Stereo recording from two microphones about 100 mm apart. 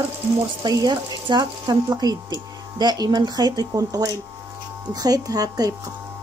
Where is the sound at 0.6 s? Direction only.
45° right (ahead or behind).